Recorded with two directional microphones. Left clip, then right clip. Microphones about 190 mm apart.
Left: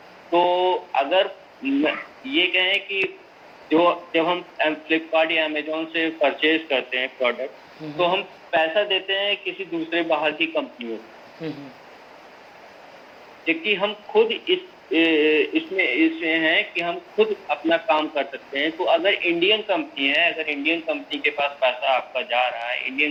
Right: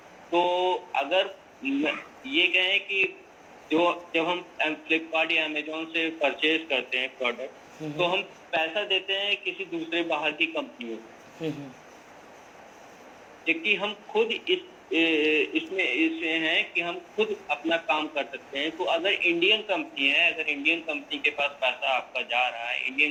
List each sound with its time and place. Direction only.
0.3 s a man's voice: 15° left (ahead or behind)
11.4 s speech: 25° right (ahead or behind)
13.4 s a man's voice: 15° left (ahead or behind)